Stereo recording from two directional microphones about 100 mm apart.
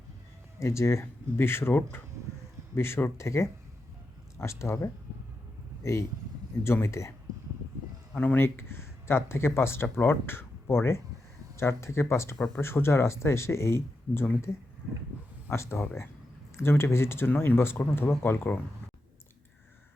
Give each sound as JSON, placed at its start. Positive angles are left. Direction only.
{"t": 0.6, "sound": "speech", "side_deg": 30}
{"t": 8.1, "sound": "speech", "side_deg": 15}